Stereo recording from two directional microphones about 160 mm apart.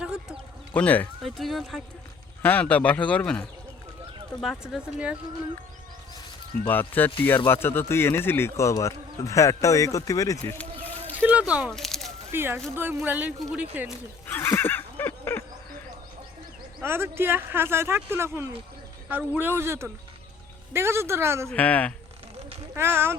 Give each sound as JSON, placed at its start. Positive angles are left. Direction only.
{"t": 0.0, "sound": "a sound", "side_deg": -5}
{"t": 0.7, "sound": "speech", "side_deg": 10}
{"t": 6.7, "sound": "speech", "side_deg": 10}
{"t": 11.2, "sound": "speech", "side_deg": -10}
{"t": 11.7, "sound": "a sound", "side_deg": 0}
{"t": 12.3, "sound": "speech", "side_deg": -15}
{"t": 14.3, "sound": "neigh", "side_deg": 15}
{"t": 16.8, "sound": "speech", "side_deg": -15}
{"t": 21.5, "sound": "speech", "side_deg": 10}
{"t": 22.7, "sound": "speech", "side_deg": -15}